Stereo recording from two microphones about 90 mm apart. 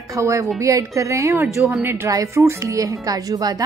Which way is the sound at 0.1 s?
35° right (ahead or behind).